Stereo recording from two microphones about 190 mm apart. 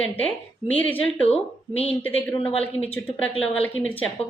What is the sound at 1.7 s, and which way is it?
Speech, 30° left (ahead or behind).